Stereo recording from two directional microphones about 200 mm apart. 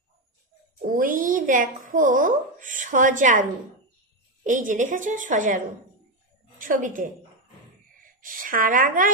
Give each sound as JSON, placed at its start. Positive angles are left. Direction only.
{"t": 0.9, "sound": "a woman's voice", "side_deg": -45}
{"t": 4.4, "sound": "a woman's voice", "side_deg": -40}
{"t": 6.6, "sound": "a woman's voice", "side_deg": -40}